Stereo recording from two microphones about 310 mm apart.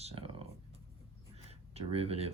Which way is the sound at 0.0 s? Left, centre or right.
Centre.